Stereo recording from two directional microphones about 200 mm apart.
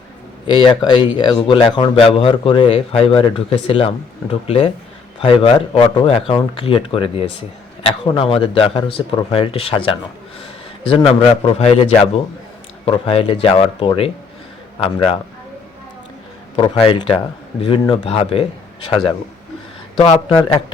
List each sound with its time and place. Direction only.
0.4 s a man's voice: 25° left (ahead or behind)
16.6 s speech: 25° left (ahead or behind)